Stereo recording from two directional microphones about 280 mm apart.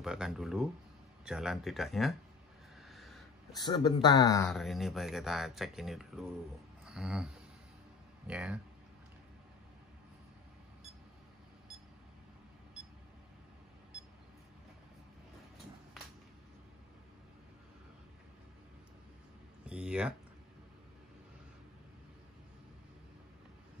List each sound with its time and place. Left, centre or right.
0.0 s speech: centre
2.9 s a sound: centre
3.5 s speech: centre
4.5 s speech: centre
19.6 s speech: centre